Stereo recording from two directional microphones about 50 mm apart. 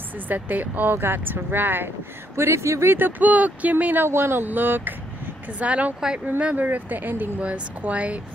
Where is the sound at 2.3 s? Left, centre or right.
Right.